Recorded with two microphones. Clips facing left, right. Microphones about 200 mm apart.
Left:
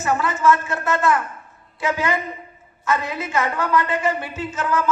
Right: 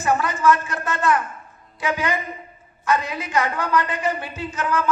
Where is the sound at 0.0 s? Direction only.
15° right (ahead or behind).